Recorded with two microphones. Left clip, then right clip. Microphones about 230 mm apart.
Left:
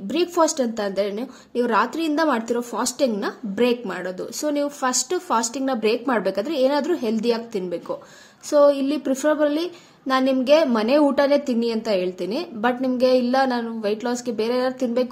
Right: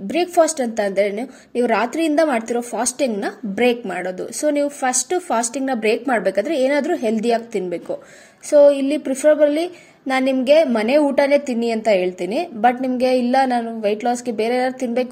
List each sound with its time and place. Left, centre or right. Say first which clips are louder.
0.2 s a woman's voice: right 3 dB; centre